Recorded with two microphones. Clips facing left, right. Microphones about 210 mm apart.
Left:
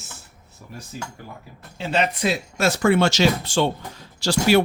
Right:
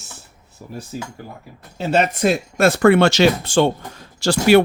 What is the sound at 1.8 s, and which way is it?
Speech, 45° right (ahead or behind).